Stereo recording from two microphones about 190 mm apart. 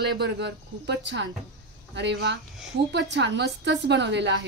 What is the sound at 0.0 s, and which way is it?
A woman's voice, 65° right (ahead or behind).